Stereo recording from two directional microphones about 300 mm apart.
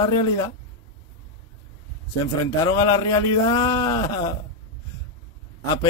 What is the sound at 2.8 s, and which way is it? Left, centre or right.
Speech, centre.